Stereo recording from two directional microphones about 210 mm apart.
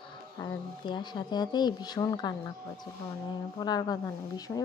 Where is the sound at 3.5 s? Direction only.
20° left (ahead or behind).